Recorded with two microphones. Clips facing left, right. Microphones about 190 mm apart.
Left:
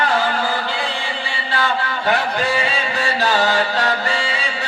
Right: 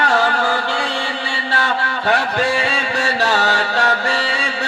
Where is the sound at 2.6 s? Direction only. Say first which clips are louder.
Right 1 dB; 70° right (ahead or behind).